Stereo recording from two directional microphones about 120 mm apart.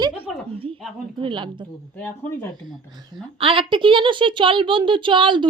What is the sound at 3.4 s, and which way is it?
A child's voice, 50° right (ahead or behind).